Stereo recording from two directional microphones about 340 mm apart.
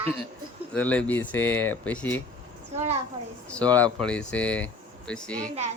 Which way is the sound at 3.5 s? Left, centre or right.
Centre.